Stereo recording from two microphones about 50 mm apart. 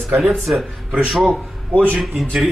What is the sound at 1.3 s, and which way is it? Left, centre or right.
Speech, right.